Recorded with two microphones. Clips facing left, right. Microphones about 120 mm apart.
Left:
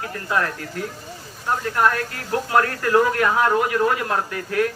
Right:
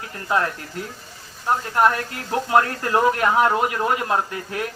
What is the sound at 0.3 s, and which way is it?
Speech, 20° right (ahead or behind).